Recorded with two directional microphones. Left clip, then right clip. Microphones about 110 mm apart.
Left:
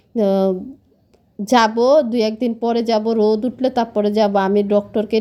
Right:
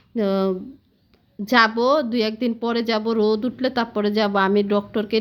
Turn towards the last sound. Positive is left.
turn(degrees=25)  # may be behind; listen again after turning